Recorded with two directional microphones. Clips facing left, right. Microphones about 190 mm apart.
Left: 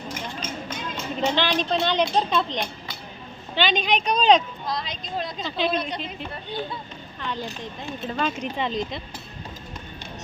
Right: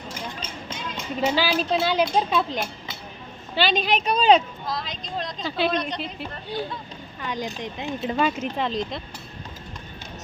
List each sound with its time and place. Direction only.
0.1 s a sound: 30° right (ahead or behind)
1.2 s a woman's voice: 5° right (ahead or behind)
5.5 s speech: 5° right (ahead or behind)
5.7 s a woman's voice: 5° left (ahead or behind)
7.2 s speech: 10° right (ahead or behind)
8.1 s a woman's voice: 5° right (ahead or behind)